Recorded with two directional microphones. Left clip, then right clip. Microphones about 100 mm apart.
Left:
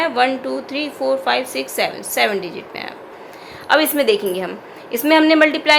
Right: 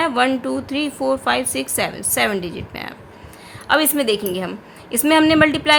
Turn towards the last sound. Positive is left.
turn(degrees=-35)  # may be behind; listen again after turning